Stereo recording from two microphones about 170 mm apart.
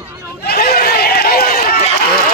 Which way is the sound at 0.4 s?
65° left (ahead or behind).